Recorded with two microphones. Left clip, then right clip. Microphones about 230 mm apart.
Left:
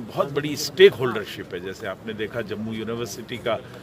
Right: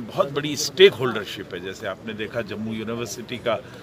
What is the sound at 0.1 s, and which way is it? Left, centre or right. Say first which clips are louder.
Speech: right 1 dB; centre.